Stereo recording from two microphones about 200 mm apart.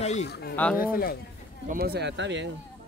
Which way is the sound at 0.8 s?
45° left (ahead or behind).